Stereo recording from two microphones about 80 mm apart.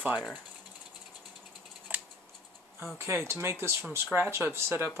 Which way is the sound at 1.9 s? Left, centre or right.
Right.